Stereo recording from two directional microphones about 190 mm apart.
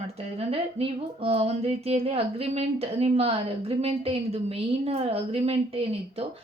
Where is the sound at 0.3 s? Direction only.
30° right (ahead or behind).